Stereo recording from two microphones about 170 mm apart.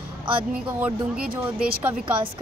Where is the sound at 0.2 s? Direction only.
30° right (ahead or behind).